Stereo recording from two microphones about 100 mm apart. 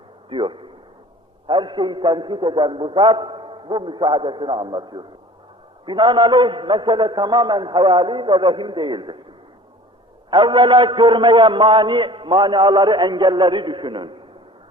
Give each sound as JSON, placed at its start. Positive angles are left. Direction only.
{"t": 0.3, "sound": "a man's voice", "side_deg": -55}
{"t": 10.2, "sound": "a man's voice", "side_deg": -50}